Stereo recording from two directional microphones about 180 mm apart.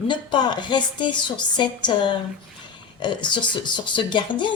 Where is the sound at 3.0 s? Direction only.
25° left (ahead or behind).